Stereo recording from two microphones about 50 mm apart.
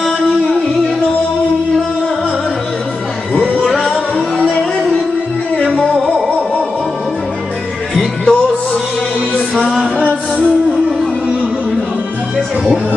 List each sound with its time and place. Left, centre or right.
3.3 s music: left
3.7 s music: centre
4.4 s a sound: centre
7.9 s music: centre